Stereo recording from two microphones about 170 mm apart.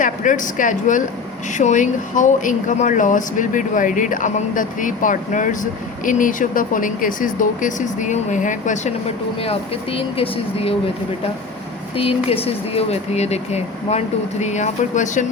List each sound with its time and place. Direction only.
0.0 s speech: 50° left (ahead or behind)
11.9 s speech: 35° left (ahead or behind)